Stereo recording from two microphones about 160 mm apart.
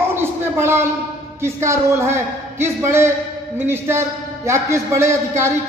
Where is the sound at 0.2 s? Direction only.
15° right (ahead or behind).